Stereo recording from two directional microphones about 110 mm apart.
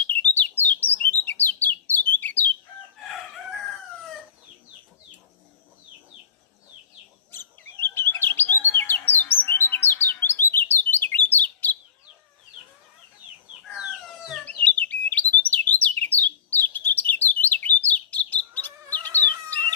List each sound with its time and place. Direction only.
0.0 s bird: 15° left (ahead or behind)
7.3 s chirp: 20° left (ahead or behind)
13.7 s chicken: 5° right (ahead or behind)
14.4 s bird: 15° left (ahead or behind)